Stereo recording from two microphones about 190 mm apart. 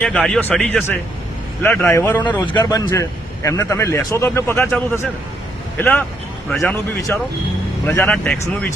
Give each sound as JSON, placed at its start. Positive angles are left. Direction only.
{"t": 0.0, "sound": "a man's voice", "side_deg": 5}